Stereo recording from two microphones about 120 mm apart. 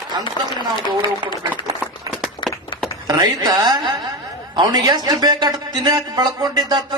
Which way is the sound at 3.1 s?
35° right (ahead or behind).